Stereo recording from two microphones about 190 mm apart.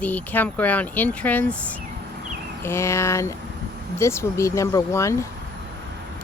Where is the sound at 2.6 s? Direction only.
15° left (ahead or behind).